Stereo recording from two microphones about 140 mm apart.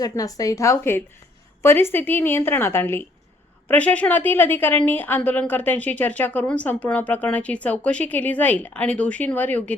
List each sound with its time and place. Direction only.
0.0 s a woman's voice: 25° left (ahead or behind)